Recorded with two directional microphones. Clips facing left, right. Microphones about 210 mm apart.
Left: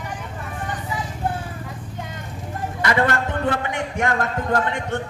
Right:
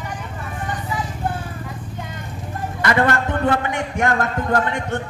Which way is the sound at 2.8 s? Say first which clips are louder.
Right 2 dB; 50° right (ahead or behind).